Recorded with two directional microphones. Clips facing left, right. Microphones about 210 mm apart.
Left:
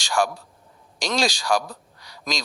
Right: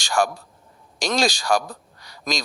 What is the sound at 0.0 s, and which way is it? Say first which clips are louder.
A man's voice: right 1 dB; 45° right (ahead or behind).